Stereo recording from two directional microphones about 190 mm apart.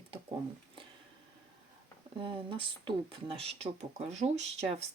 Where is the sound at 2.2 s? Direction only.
25° right (ahead or behind).